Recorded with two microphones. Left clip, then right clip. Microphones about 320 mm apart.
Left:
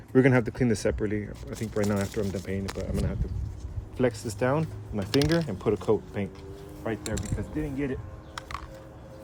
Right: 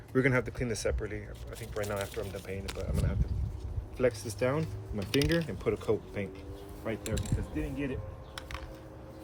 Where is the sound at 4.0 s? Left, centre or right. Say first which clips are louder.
Left 3 dB; left.